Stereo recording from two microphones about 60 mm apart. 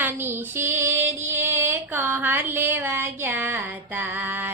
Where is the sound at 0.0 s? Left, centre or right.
Right.